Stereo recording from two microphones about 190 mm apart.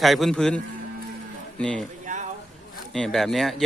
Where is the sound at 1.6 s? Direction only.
5° left (ahead or behind).